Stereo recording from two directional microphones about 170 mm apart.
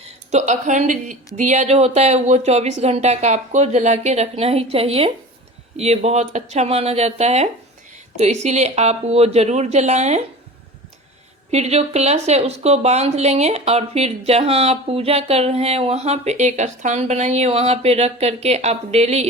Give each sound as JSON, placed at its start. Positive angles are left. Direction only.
{"t": 0.0, "sound": "speech", "side_deg": -40}
{"t": 11.5, "sound": "speech", "side_deg": -40}